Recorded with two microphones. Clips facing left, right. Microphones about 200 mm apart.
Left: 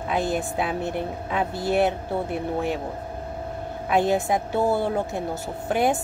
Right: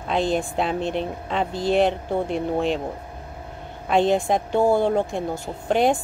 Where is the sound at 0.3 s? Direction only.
5° left (ahead or behind).